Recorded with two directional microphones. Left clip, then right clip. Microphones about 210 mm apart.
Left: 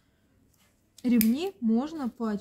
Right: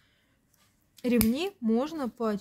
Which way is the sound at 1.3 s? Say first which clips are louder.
Even; 55° right (ahead or behind).